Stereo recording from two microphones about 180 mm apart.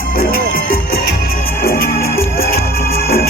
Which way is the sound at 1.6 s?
55° left (ahead or behind).